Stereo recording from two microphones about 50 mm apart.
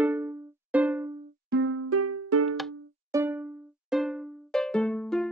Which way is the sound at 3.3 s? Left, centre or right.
Right.